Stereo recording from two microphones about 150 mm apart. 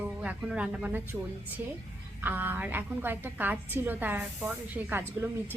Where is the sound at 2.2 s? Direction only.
10° right (ahead or behind).